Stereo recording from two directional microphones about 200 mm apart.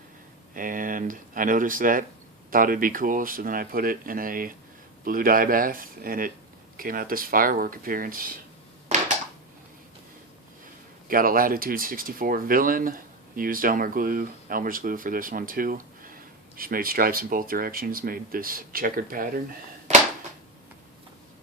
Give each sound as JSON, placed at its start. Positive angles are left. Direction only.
{"t": 0.5, "sound": "speech", "side_deg": -40}
{"t": 8.9, "sound": "a sound", "side_deg": -35}
{"t": 11.1, "sound": "speech", "side_deg": -45}